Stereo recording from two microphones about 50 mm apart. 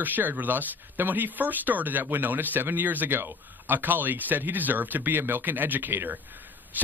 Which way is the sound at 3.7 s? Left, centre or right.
Right.